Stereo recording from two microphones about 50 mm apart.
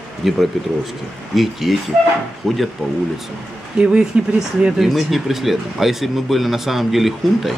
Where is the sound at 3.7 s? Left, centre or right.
Right.